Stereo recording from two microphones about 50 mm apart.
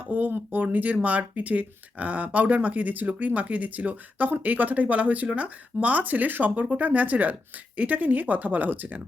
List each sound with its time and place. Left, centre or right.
0.0 s speech: right